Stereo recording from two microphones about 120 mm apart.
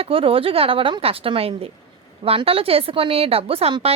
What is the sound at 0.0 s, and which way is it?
A woman's voice, 50° right (ahead or behind).